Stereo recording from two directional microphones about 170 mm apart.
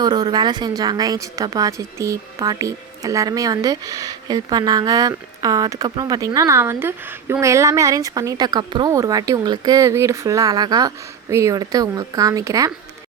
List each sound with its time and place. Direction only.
0.0 s a woman's voice: 25° right (ahead or behind)